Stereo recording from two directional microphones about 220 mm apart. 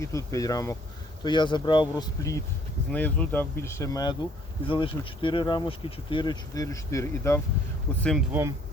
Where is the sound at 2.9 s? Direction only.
5° left (ahead or behind).